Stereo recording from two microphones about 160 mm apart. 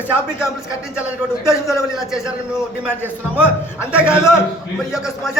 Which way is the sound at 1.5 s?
15° left (ahead or behind).